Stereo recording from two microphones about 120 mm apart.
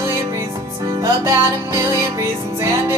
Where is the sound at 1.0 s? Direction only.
25° right (ahead or behind).